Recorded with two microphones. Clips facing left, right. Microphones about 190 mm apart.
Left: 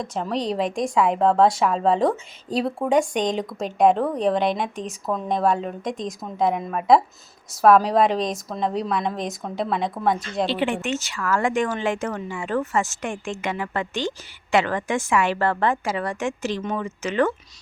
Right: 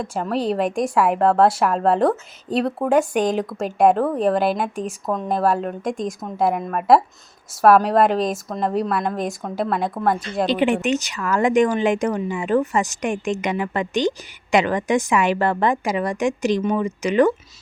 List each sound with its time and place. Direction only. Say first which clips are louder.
0.0 s a woman's voice: right 3 dB; 5° right (ahead or behind)
10.4 s speech: right 5 dB; 15° right (ahead or behind)